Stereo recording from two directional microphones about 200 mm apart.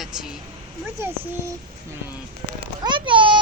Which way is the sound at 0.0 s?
Centre (ahead or behind).